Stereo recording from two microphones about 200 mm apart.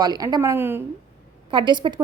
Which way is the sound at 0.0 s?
20° right (ahead or behind).